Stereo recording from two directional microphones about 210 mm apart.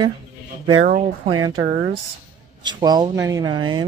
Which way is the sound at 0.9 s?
30° right (ahead or behind).